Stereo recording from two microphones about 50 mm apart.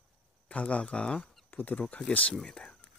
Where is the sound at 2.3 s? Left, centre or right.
Centre.